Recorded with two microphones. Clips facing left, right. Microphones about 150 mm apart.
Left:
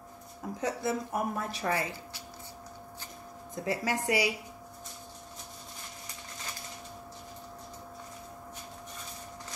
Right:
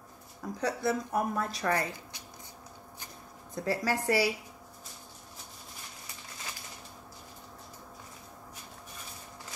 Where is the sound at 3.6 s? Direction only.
20° left (ahead or behind).